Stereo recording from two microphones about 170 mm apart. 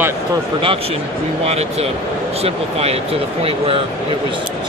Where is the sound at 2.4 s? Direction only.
35° right (ahead or behind).